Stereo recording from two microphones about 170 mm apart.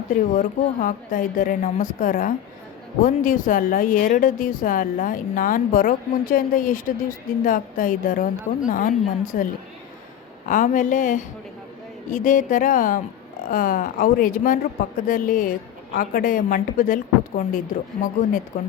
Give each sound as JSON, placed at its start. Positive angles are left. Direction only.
{"t": 0.1, "sound": "a woman's voice", "side_deg": 50}
{"t": 10.5, "sound": "a woman's voice", "side_deg": 50}